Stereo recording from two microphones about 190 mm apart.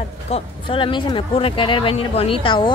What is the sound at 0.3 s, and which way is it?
Speech, 25° left (ahead or behind).